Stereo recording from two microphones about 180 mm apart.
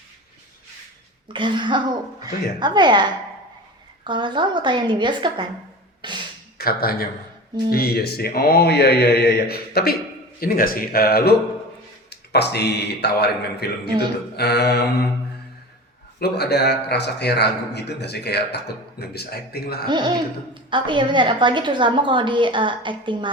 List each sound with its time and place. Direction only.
1.3 s a woman's voice: 25° right (ahead or behind)
6.0 s a sound: 25° right (ahead or behind)
6.6 s a man's voice: 55° left (ahead or behind)
16.2 s a man's voice: 65° left (ahead or behind)
19.9 s a woman's voice: 25° right (ahead or behind)